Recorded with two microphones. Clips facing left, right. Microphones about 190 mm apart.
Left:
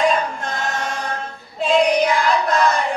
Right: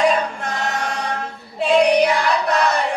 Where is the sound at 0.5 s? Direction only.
65° right (ahead or behind).